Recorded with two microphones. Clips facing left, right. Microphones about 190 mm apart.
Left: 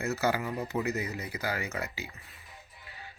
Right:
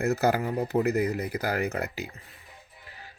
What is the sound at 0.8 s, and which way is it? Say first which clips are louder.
Speech: right 7 dB; 55° right (ahead or behind).